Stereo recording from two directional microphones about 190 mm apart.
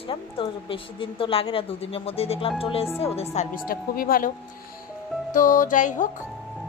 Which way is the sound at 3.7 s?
50° left (ahead or behind).